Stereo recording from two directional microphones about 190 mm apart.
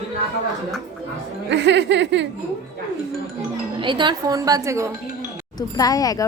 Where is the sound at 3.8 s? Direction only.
25° right (ahead or behind).